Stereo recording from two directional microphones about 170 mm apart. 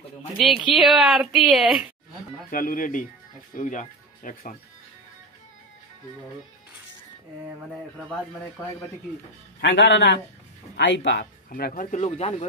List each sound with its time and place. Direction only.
0.3 s speech: centre (ahead or behind)
2.5 s speech: 55° left (ahead or behind)
9.6 s a man's voice: 90° left
11.1 s speech: 80° left
11.7 s speech: 45° left (ahead or behind)